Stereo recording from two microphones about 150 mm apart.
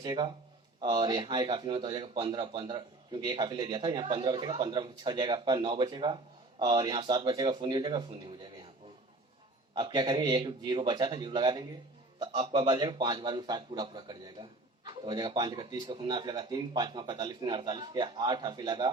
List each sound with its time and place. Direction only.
0.0 s a man's voice: 25° right (ahead or behind)
9.7 s a man's voice: 30° right (ahead or behind)
12.2 s a man's voice: 40° right (ahead or behind)